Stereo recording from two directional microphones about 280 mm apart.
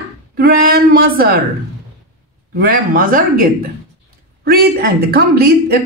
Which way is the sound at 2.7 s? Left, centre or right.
Right.